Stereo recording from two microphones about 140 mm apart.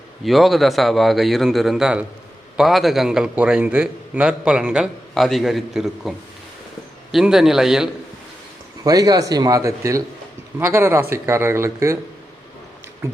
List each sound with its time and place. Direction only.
0.3 s a man's voice: centre (ahead or behind)
8.8 s a man's voice: 25° right (ahead or behind)